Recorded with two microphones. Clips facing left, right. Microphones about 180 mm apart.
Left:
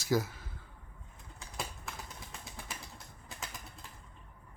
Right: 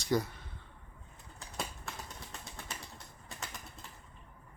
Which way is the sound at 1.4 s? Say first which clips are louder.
Right 1 dB; centre (ahead or behind).